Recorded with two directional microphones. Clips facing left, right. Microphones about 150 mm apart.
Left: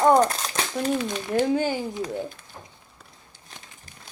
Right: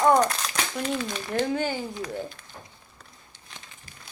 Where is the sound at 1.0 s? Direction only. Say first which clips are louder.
Left 4 dB; 15° left (ahead or behind).